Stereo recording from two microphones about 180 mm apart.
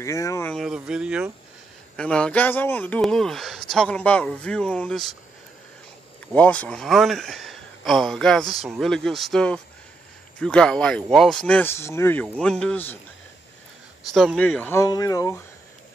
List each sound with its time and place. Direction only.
0.0 s speech: 15° left (ahead or behind)
0.5 s speech: centre (ahead or behind)
2.0 s speech: 5° left (ahead or behind)
6.3 s speech: 5° left (ahead or behind)
14.1 s speech: centre (ahead or behind); by 15.4 s 20° left (ahead or behind)